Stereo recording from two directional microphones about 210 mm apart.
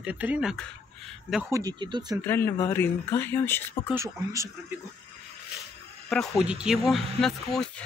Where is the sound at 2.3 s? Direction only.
10° left (ahead or behind).